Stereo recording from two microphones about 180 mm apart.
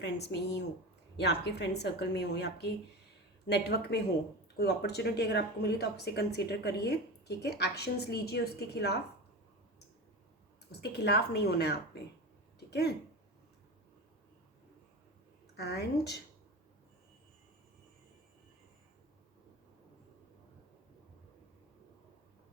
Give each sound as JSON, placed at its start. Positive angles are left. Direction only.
{"t": 0.0, "sound": "a woman's voice", "side_deg": 70}
{"t": 10.7, "sound": "speech", "side_deg": 65}
{"t": 12.5, "sound": "a sound", "side_deg": 65}
{"t": 15.5, "sound": "speech", "side_deg": 65}